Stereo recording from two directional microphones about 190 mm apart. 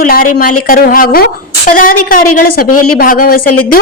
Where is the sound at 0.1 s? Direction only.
50° left (ahead or behind).